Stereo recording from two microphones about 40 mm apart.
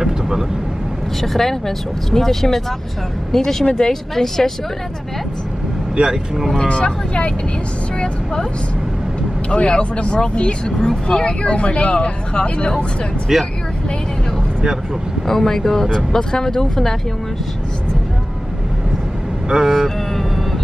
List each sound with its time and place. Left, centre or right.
0.0 s vehicle: centre
1.2 s speech: centre
5.9 s speech: centre
6.6 s speech: left
9.5 s speech: left
13.3 s speech: centre
15.2 s speech: centre
19.7 s vehicle: centre